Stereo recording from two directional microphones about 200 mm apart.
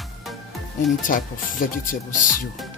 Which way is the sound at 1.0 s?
40° left (ahead or behind).